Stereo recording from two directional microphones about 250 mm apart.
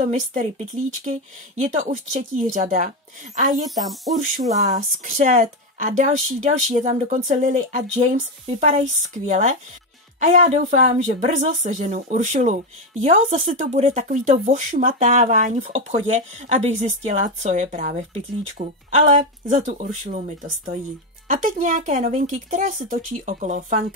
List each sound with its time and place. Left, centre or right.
0.1 s speech: right
3.9 s speech: centre
4.7 s speech: right
21.3 s speech: right